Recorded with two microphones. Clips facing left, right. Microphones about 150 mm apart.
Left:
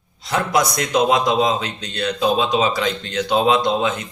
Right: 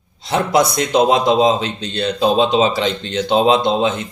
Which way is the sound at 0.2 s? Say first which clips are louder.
Right 4 dB; 25° right (ahead or behind).